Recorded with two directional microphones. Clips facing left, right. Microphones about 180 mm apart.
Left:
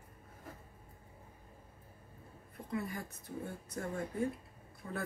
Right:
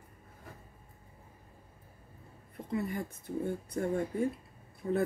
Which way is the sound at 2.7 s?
25° right (ahead or behind).